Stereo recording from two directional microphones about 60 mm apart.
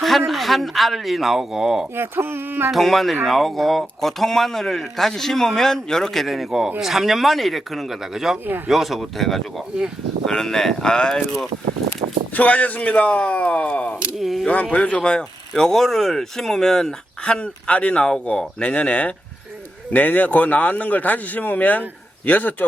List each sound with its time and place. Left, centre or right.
0.0 s speech: centre
2.0 s speech: right
2.7 s speech: centre
12.3 s speech: left
14.2 s speech: centre
14.4 s speech: left